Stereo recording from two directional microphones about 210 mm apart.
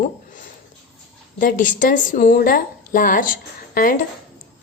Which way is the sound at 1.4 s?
40° left (ahead or behind).